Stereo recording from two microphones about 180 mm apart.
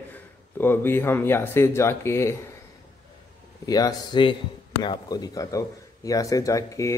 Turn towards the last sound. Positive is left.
turn(degrees=15)  # may be behind; listen again after turning